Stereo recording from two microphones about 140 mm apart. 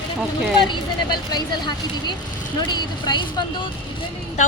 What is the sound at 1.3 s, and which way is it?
Speech, 30° left (ahead or behind).